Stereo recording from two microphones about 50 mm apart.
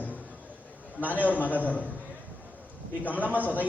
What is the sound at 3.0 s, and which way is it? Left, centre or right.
Speech, left.